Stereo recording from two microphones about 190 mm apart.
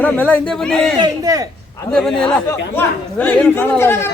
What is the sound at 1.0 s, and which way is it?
Speech, 20° right (ahead or behind).